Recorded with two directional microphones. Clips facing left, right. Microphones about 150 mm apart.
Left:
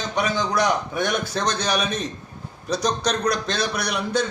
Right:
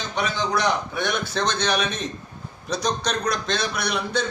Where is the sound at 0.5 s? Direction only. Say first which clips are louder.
Left 1 dB; 40° left (ahead or behind).